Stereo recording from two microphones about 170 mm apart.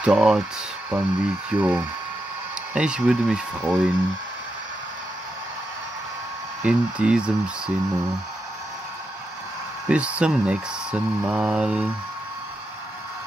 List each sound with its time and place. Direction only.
0.0 s speech: 5° right (ahead or behind)
6.6 s speech: 5° right (ahead or behind)
9.8 s speech: 5° right (ahead or behind)